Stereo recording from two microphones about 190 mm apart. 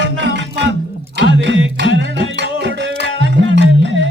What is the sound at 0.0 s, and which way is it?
Music, 70° right (ahead or behind).